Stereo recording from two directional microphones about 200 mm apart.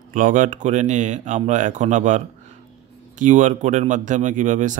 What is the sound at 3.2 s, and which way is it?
Speech, 40° right (ahead or behind).